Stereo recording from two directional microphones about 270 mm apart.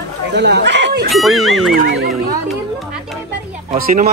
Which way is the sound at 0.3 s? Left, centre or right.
Right.